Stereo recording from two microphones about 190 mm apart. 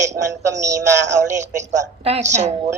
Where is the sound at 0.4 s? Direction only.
15° right (ahead or behind).